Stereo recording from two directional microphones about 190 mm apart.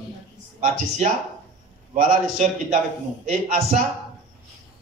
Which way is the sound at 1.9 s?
40° right (ahead or behind).